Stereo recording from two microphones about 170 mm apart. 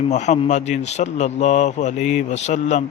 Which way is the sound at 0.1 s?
45° left (ahead or behind).